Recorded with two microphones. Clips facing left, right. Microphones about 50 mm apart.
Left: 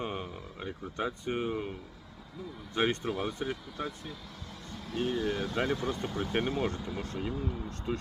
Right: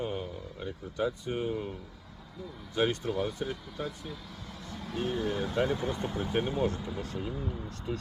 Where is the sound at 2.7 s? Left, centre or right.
Left.